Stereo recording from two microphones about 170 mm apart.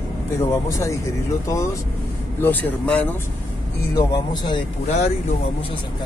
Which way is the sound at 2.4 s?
10° left (ahead or behind).